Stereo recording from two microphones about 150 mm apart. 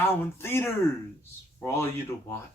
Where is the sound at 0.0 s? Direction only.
15° left (ahead or behind).